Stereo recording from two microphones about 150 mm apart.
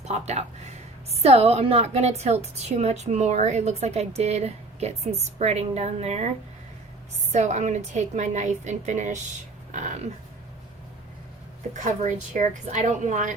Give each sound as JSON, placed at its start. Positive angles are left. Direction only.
{"t": 0.0, "sound": "a woman's voice", "side_deg": -50}
{"t": 7.3, "sound": "a woman's voice", "side_deg": -50}
{"t": 11.7, "sound": "speech", "side_deg": -55}